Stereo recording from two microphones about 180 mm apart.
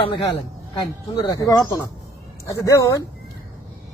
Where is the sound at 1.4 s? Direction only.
20° left (ahead or behind).